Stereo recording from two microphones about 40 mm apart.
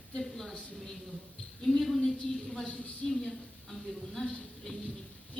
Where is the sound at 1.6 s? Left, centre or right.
Centre.